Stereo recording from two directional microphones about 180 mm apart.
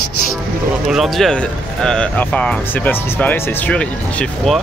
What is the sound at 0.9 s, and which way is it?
Speech, centre (ahead or behind).